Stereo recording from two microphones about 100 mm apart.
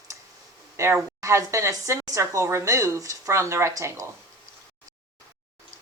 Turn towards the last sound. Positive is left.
turn(degrees=-30)  # may be behind; listen again after turning